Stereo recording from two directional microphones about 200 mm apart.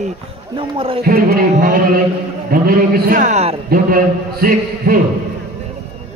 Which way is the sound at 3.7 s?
45° right (ahead or behind).